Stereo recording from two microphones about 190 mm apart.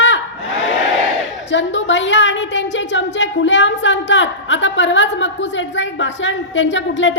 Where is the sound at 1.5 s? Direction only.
75° left (ahead or behind).